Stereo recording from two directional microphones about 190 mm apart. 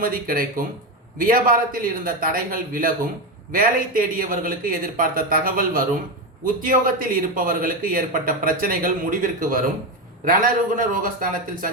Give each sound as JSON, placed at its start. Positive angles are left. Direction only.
{"t": 0.0, "sound": "a man's voice", "side_deg": -50}